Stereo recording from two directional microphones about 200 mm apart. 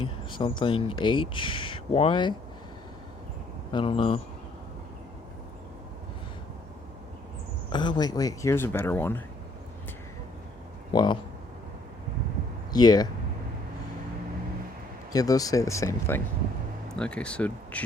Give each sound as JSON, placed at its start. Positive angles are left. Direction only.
{"t": 0.0, "sound": "speech", "side_deg": 25}
{"t": 3.7, "sound": "speech", "side_deg": 25}
{"t": 7.7, "sound": "speech", "side_deg": 20}
{"t": 10.9, "sound": "speech", "side_deg": 20}
{"t": 12.7, "sound": "speech", "side_deg": 20}
{"t": 15.1, "sound": "speech", "side_deg": 20}